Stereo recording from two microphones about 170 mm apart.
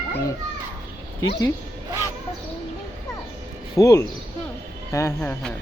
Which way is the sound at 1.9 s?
20° right (ahead or behind).